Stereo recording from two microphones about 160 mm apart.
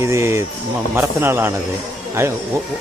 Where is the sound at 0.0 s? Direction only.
15° right (ahead or behind).